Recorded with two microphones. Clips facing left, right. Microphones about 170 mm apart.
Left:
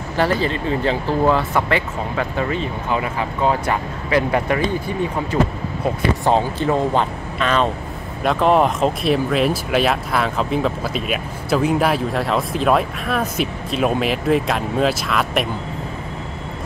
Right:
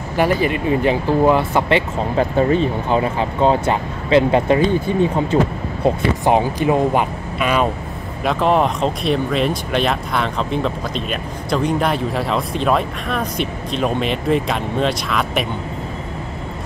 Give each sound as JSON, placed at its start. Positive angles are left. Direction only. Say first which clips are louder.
{"t": 0.2, "sound": "speech", "louder": "right 2 dB", "side_deg": -15}
{"t": 2.3, "sound": "speech", "louder": "right 7 dB", "side_deg": -35}
{"t": 8.2, "sound": "speech", "louder": "left 1 dB", "side_deg": 0}